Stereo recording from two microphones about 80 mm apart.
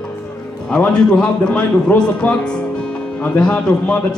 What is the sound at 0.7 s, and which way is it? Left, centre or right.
Speech, centre.